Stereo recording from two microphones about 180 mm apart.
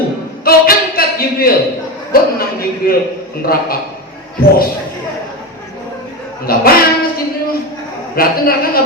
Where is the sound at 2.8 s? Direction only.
55° left (ahead or behind).